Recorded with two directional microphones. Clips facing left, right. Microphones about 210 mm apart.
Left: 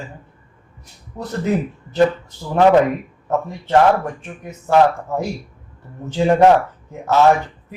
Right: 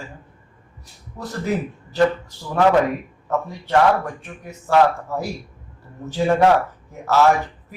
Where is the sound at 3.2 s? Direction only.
20° left (ahead or behind).